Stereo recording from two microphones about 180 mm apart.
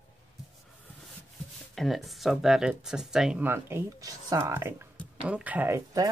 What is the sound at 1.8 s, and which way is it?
Speech, centre (ahead or behind).